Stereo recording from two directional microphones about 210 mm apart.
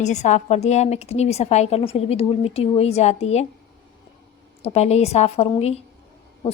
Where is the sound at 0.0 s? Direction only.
35° left (ahead or behind).